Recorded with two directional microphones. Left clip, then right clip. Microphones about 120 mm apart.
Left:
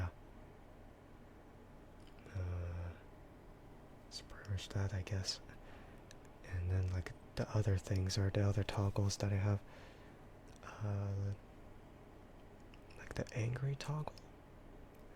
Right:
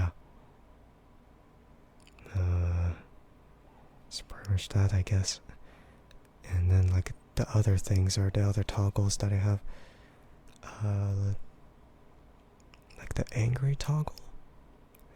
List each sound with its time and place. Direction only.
2.2 s a sound: 15° right (ahead or behind)
4.1 s speech: 15° right (ahead or behind)
13.0 s speech: 5° right (ahead or behind)